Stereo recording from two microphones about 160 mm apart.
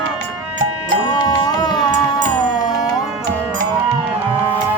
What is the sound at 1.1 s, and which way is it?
Music, 25° left (ahead or behind).